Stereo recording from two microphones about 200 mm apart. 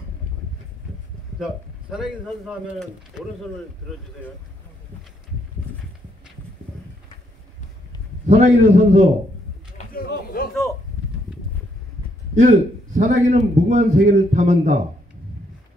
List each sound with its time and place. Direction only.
1.4 s speech: 5° right (ahead or behind)
8.3 s a man's voice: 30° right (ahead or behind)
10.0 s a sound: 45° left (ahead or behind)
12.4 s a man's voice: 40° right (ahead or behind)